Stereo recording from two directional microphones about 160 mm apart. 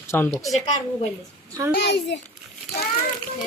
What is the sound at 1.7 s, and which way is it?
Speech, 90° left.